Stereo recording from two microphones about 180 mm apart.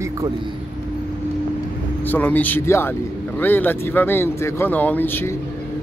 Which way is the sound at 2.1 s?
10° left (ahead or behind).